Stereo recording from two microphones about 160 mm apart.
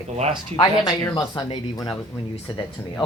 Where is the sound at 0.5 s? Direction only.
20° left (ahead or behind).